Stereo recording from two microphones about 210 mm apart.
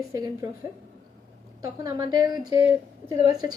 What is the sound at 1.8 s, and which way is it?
Speech, 20° right (ahead or behind).